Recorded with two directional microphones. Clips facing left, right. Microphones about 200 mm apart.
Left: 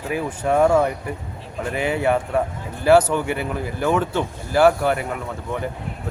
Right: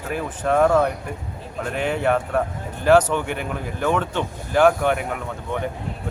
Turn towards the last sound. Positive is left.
turn(degrees=0)  # may be behind; listen again after turning